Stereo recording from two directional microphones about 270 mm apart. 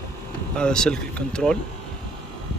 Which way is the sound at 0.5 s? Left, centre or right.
Centre.